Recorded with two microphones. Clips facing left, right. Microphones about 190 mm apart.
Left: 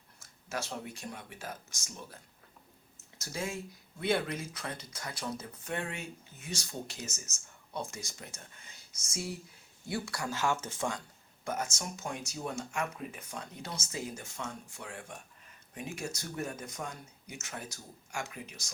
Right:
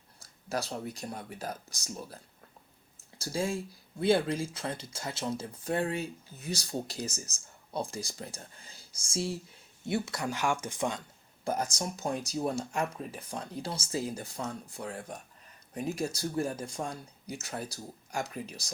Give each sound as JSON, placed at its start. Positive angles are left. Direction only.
{"t": 0.2, "sound": "speech", "side_deg": -35}
{"t": 3.2, "sound": "speech", "side_deg": -30}
{"t": 11.4, "sound": "speech", "side_deg": -35}